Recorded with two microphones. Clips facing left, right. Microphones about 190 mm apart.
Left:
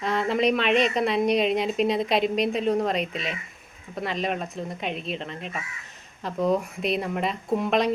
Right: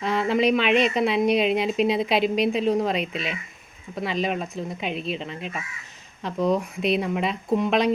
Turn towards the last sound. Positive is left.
turn(degrees=0)  # may be behind; listen again after turning